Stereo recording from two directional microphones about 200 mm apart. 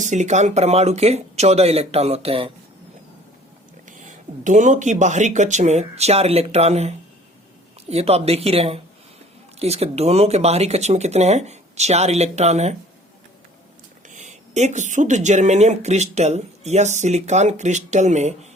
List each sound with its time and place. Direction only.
0.0 s speech: 35° right (ahead or behind)
4.4 s speech: 40° right (ahead or behind)
14.1 s speech: 40° right (ahead or behind)